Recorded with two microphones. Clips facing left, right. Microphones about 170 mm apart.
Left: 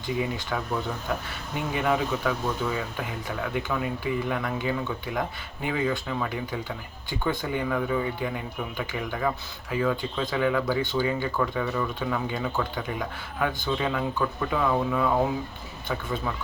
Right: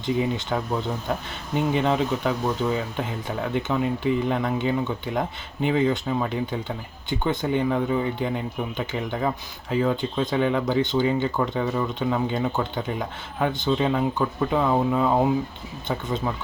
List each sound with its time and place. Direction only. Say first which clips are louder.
0.2 s speech: right 4 dB; 25° right (ahead or behind)
1.7 s speech: right 1 dB; 25° right (ahead or behind)